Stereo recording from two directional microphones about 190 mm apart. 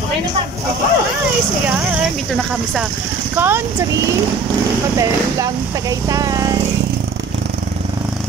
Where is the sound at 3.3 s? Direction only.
10° right (ahead or behind).